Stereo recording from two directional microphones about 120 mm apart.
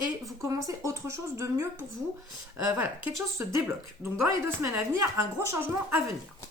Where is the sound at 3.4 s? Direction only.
20° right (ahead or behind).